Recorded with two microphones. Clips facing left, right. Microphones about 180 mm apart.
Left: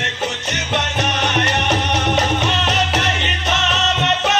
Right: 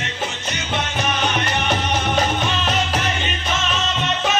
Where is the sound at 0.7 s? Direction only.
75° left (ahead or behind).